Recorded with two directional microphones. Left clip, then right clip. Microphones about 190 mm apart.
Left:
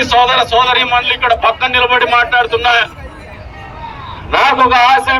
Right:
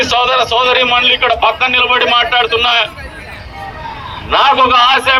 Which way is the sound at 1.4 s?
40° left (ahead or behind).